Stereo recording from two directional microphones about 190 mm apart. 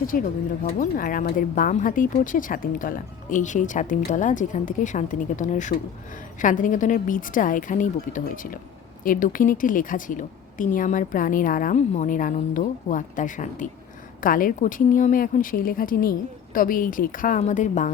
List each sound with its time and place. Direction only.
0.1 s speech: 45° left (ahead or behind)